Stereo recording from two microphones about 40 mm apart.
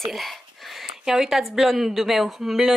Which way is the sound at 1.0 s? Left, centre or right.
Centre.